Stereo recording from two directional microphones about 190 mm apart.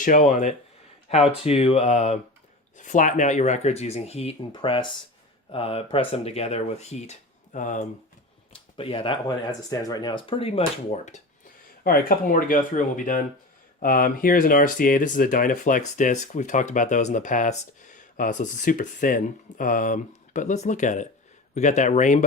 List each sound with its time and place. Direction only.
0.0 s speech: 45° left (ahead or behind)
1.3 s speech: 30° left (ahead or behind)
8.5 s speech: 30° left (ahead or behind)
11.8 s speech: 50° left (ahead or behind)